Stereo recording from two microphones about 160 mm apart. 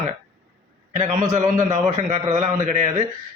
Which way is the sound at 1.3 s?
50° right (ahead or behind).